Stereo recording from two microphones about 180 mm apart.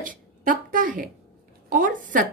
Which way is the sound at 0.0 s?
45° right (ahead or behind).